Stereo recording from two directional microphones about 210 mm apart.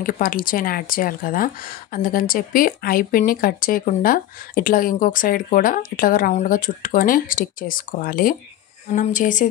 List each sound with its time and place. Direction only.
0.0 s speech: 40° left (ahead or behind)